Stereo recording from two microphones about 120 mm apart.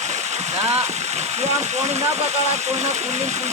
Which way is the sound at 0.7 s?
65° right (ahead or behind).